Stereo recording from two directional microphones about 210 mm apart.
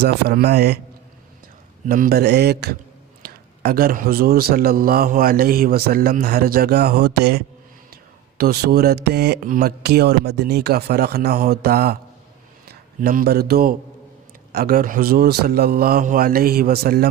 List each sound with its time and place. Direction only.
0.0 s a man's voice: 50° right (ahead or behind)
1.9 s a man's voice: 45° right (ahead or behind)